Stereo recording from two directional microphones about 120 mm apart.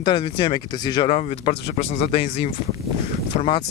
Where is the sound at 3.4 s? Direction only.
45° left (ahead or behind).